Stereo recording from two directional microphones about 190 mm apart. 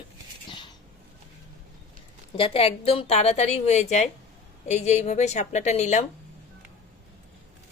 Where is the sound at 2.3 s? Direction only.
30° left (ahead or behind).